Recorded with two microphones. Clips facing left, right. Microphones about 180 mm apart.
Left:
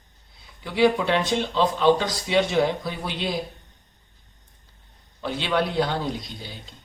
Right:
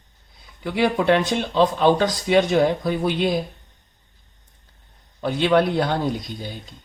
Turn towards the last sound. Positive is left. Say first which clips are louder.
# right 4 dB
turn(degrees=-50)  # may be behind; listen again after turning